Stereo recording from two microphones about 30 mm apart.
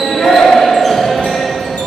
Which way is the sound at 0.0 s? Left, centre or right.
Centre.